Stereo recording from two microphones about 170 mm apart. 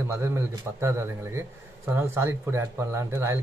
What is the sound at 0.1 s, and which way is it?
Speech, 15° right (ahead or behind).